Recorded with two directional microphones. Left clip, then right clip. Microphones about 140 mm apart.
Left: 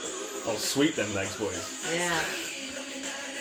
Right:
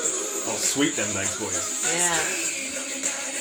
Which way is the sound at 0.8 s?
15° left (ahead or behind).